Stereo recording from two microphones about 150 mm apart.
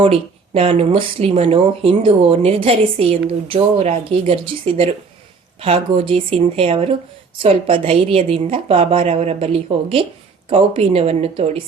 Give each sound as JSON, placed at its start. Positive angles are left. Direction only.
{"t": 0.0, "sound": "speech", "side_deg": -40}